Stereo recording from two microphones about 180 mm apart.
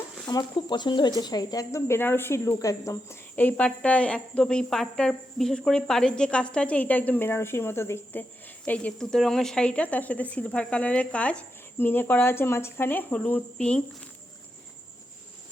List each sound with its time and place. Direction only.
0.3 s speech: 25° left (ahead or behind); by 13.8 s 5° left (ahead or behind)